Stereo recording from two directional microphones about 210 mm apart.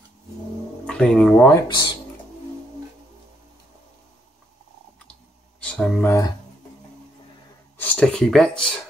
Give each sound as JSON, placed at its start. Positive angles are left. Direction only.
{"t": 0.8, "sound": "speech", "side_deg": 5}
{"t": 1.7, "sound": "speech", "side_deg": 20}
{"t": 5.6, "sound": "a sound", "side_deg": 5}
{"t": 7.8, "sound": "speech", "side_deg": 5}